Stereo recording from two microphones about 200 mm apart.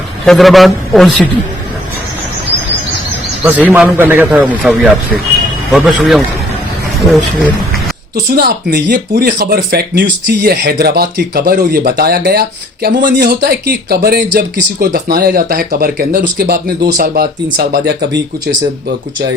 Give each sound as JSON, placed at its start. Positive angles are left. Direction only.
{"t": 0.3, "sound": "a man's voice", "side_deg": 0}
{"t": 3.6, "sound": "a man's voice", "side_deg": -10}
{"t": 8.4, "sound": "speech", "side_deg": -50}